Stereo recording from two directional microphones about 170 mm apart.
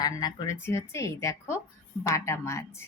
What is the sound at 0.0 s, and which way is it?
A woman's voice, 25° left (ahead or behind).